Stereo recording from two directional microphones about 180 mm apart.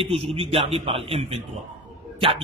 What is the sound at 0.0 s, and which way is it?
A man's voice, 30° right (ahead or behind).